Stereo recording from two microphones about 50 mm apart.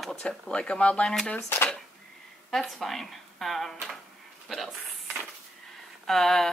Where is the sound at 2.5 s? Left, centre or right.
Centre.